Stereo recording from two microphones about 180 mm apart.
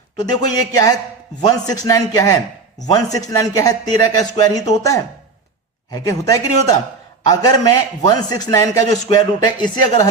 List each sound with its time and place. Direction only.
0.5 s a man's voice: 20° left (ahead or behind)